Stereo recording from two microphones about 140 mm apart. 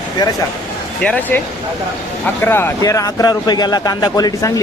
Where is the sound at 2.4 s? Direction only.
15° left (ahead or behind).